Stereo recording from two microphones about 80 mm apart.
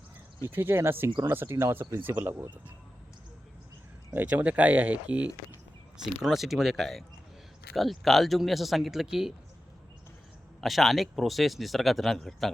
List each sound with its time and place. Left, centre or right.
0.4 s speech: right
4.1 s speech: right
6.2 s speech: centre
10.6 s speech: centre